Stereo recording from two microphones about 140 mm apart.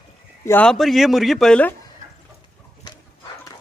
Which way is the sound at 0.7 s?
Centre (ahead or behind).